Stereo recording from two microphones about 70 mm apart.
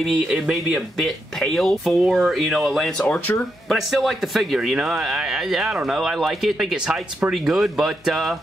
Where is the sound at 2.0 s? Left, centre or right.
Centre.